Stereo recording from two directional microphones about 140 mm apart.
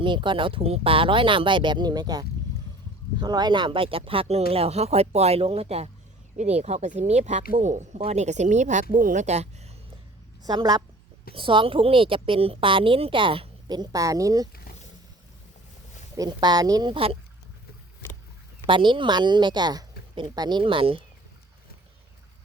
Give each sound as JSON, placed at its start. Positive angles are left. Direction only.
{"t": 0.0, "sound": "speech", "side_deg": -35}
{"t": 10.4, "sound": "a woman's voice", "side_deg": -30}
{"t": 16.1, "sound": "a woman's voice", "side_deg": -30}
{"t": 18.6, "sound": "speech", "side_deg": -35}